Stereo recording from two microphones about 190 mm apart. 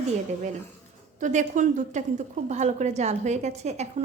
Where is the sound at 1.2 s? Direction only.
40° right (ahead or behind).